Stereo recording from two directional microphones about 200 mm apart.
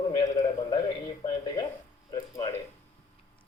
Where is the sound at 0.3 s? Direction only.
20° left (ahead or behind).